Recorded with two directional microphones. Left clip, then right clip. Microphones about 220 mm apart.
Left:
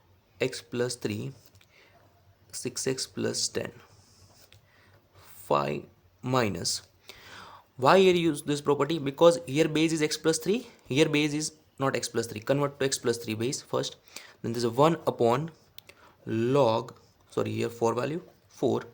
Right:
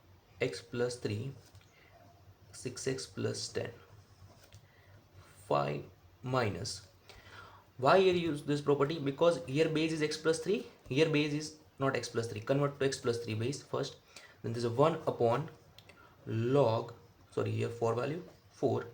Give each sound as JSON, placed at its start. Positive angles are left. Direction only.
{"t": 0.3, "sound": "speech", "side_deg": 50}
{"t": 2.5, "sound": "speech", "side_deg": 50}
{"t": 5.5, "sound": "speech", "side_deg": 50}